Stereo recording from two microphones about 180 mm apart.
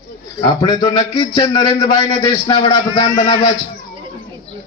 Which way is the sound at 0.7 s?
25° left (ahead or behind).